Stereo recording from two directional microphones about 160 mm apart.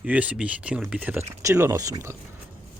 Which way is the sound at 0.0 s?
10° right (ahead or behind).